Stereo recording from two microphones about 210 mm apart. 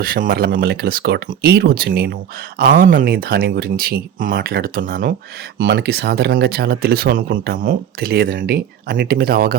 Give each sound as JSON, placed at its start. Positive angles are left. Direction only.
{"t": 0.0, "sound": "speech", "side_deg": -45}